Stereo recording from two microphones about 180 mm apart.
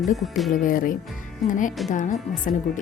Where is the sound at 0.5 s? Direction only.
50° left (ahead or behind).